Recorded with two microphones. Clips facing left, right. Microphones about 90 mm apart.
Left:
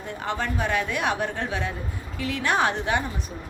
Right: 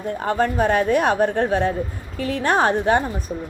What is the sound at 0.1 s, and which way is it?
A woman's voice, 45° right (ahead or behind).